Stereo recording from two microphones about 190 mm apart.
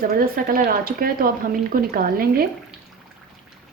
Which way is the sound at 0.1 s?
50° right (ahead or behind).